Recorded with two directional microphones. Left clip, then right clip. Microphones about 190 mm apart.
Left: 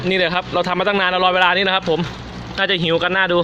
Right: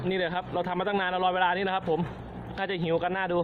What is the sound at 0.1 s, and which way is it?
A man's voice, 15° left (ahead or behind).